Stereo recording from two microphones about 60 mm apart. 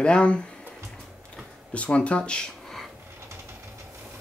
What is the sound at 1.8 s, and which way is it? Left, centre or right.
Speech, left.